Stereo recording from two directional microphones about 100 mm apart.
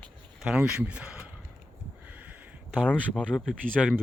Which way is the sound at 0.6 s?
10° right (ahead or behind).